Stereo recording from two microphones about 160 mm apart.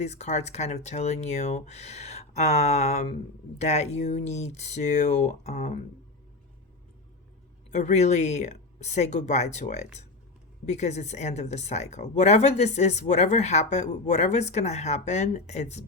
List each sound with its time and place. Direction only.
0.0 s a woman's voice: 45° left (ahead or behind)
7.7 s a woman's voice: 45° left (ahead or behind)